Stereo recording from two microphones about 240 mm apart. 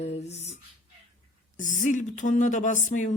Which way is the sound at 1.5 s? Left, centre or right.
Left.